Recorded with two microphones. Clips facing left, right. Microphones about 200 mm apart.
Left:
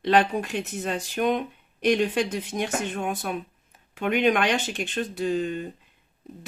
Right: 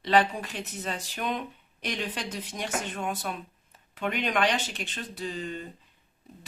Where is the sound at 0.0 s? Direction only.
50° left (ahead or behind).